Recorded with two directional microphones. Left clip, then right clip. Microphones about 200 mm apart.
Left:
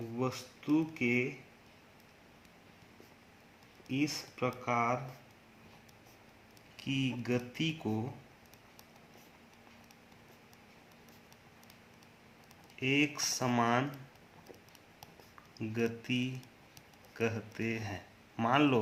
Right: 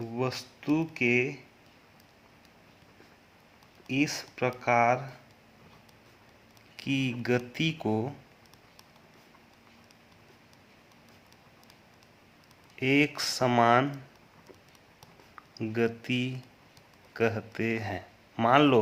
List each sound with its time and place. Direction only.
0.2 s speech: 55° right (ahead or behind)
3.8 s speech: 50° right (ahead or behind)
6.7 s speech: 45° right (ahead or behind)
12.8 s speech: 40° right (ahead or behind)
15.5 s speech: 35° right (ahead or behind)